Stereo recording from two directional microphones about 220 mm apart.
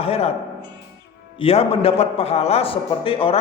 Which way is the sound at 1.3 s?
25° left (ahead or behind).